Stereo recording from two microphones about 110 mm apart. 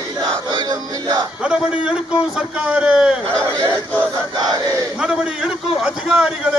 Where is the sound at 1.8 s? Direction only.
10° right (ahead or behind).